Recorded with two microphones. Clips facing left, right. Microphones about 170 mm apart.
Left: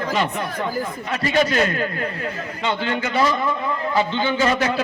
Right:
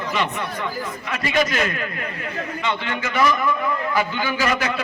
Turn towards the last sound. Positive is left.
turn(degrees=30)  # may be behind; listen again after turning